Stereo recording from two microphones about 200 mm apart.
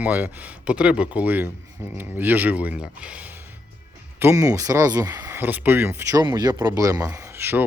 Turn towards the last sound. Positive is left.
turn(degrees=-10)  # may be behind; listen again after turning